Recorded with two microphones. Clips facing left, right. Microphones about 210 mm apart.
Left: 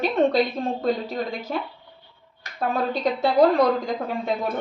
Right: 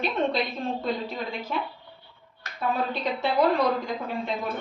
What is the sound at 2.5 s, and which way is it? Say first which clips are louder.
A woman's voice: left 3 dB; 40° left (ahead or behind).